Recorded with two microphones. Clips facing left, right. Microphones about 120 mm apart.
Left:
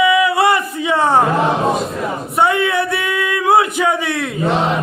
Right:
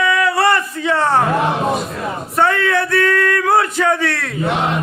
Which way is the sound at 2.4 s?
15° left (ahead or behind).